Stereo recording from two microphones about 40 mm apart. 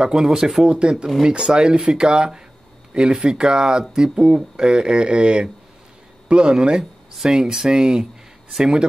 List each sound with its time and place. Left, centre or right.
0.0 s speech: centre